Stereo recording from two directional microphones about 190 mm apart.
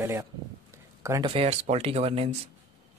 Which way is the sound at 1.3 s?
30° right (ahead or behind).